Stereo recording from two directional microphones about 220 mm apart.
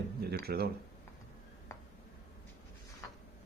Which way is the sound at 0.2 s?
45° right (ahead or behind).